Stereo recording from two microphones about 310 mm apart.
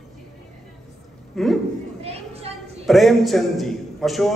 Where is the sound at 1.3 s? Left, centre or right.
Centre.